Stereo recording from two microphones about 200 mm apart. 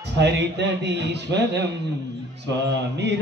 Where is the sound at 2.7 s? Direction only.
60° right (ahead or behind).